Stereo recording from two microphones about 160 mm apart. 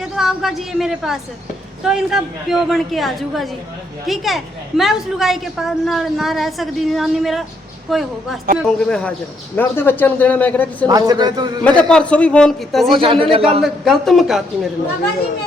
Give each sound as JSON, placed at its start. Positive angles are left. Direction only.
{"t": 0.0, "sound": "a woman's voice", "side_deg": 0}
{"t": 10.8, "sound": "a man's voice", "side_deg": -25}
{"t": 11.6, "sound": "a woman's voice", "side_deg": 5}
{"t": 13.0, "sound": "a man's voice", "side_deg": -35}
{"t": 13.6, "sound": "a woman's voice", "side_deg": 0}